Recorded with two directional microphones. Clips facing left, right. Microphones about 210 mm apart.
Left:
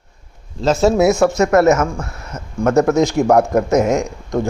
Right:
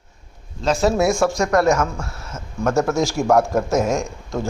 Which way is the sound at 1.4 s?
5° left (ahead or behind).